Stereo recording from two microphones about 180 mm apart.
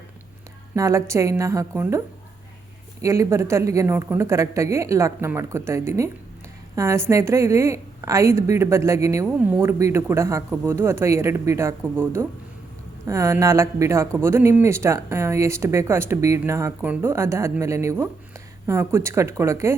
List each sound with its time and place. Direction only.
0.8 s speech: 15° right (ahead or behind)
3.0 s speech: 15° right (ahead or behind)